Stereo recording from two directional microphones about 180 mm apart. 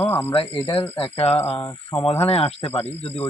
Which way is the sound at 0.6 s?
15° left (ahead or behind).